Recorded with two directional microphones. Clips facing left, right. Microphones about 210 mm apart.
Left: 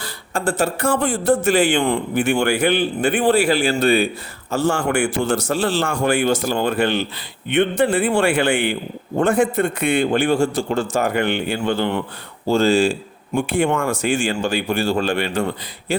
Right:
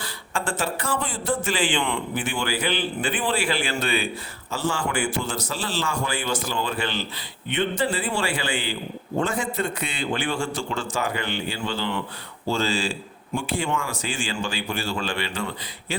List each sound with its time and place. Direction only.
0.0 s a sound: 40° left (ahead or behind)
0.6 s speech: 45° left (ahead or behind)
1.5 s speech: 65° left (ahead or behind)
1.7 s speech: 40° left (ahead or behind)
2.1 s a man's voice: 65° left (ahead or behind)
2.6 s speech: 50° left (ahead or behind)
3.2 s speech: 40° left (ahead or behind)
5.2 s speech: 60° left (ahead or behind)
6.3 s speech: 55° left (ahead or behind)